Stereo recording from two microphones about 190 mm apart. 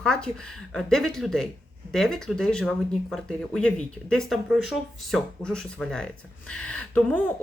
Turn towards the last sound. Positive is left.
turn(degrees=10)  # may be behind; listen again after turning